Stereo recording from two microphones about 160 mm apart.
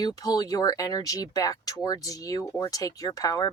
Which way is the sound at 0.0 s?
25° left (ahead or behind).